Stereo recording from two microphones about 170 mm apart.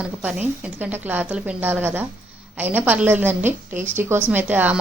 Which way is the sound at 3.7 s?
45° right (ahead or behind).